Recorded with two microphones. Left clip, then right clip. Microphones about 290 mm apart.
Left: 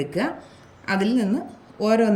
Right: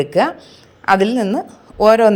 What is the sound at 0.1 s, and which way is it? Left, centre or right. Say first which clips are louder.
A woman's voice: right 11 dB; centre.